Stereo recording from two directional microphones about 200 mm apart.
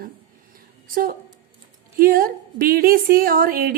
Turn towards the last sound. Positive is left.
turn(degrees=-45)  # may be behind; listen again after turning